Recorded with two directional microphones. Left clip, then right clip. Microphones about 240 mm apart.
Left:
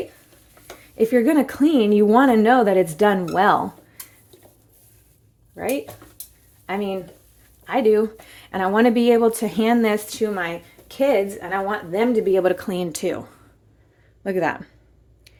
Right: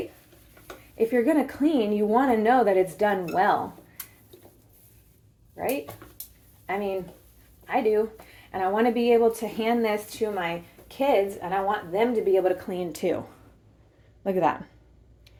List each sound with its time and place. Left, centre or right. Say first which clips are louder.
0.9 s speech: left 5 dB; left
6.7 s speech: left 3 dB; left; by 14.7 s centre